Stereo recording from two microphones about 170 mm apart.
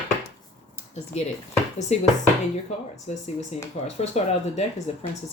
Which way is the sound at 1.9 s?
40° left (ahead or behind).